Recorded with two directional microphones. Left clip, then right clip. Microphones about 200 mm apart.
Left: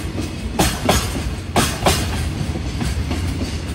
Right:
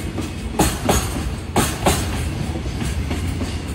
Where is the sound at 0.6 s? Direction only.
35° left (ahead or behind).